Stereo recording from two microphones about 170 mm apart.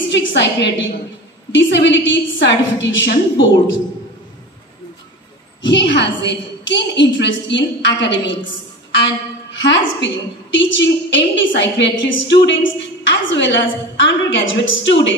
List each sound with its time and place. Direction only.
0.1 s a woman's voice: 90° left
5.6 s a woman's voice: 90° left
9.5 s a woman's voice: 90° left